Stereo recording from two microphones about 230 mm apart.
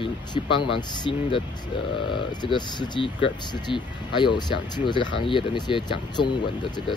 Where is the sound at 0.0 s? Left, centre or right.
Centre.